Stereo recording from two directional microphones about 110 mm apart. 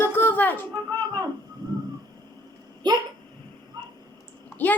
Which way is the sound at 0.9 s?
45° right (ahead or behind).